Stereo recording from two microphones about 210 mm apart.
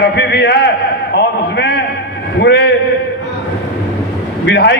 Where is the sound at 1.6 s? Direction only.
50° left (ahead or behind).